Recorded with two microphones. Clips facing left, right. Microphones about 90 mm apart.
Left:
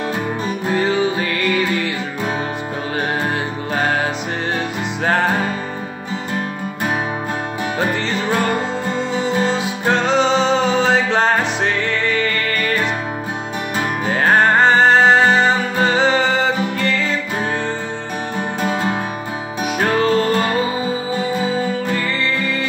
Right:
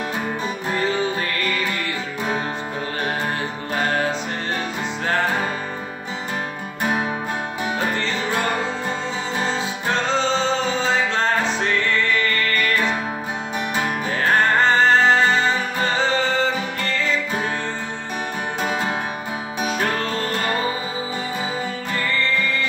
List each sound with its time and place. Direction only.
0.8 s music: 15° left (ahead or behind)
1.2 s music: 90° left
3.8 s music: 90° left
9.5 s music: 15° left (ahead or behind)
10.0 s music: 75° left (ahead or behind)
11.1 s music: 90° left
14.0 s music: 90° left
19.6 s music: 10° left (ahead or behind)
22.0 s music: 90° left